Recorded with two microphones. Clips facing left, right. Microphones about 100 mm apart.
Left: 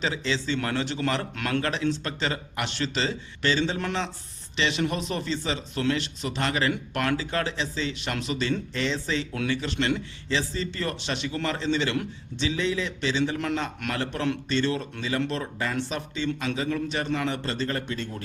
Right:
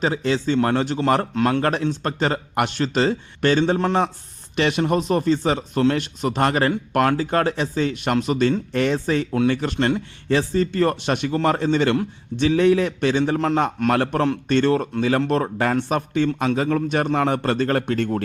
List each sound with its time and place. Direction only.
0.0 s speech: 45° right (ahead or behind)
1.9 s a man's voice: 45° right (ahead or behind)